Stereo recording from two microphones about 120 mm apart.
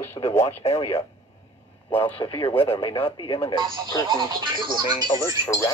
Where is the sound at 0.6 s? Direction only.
55° left (ahead or behind).